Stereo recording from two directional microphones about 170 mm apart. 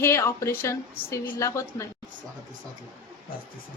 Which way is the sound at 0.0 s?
15° left (ahead or behind).